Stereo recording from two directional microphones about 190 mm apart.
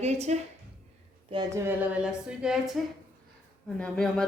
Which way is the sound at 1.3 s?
25° right (ahead or behind).